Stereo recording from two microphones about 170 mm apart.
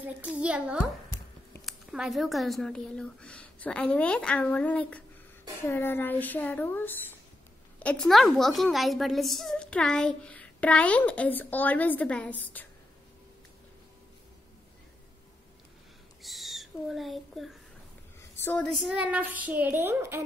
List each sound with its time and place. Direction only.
0.0 s a woman's voice: 5° right (ahead or behind); by 12.4 s 10° left (ahead or behind)
16.2 s a sound: centre (ahead or behind)
18.4 s a woman's voice: 10° left (ahead or behind); by 20.2 s 15° right (ahead or behind)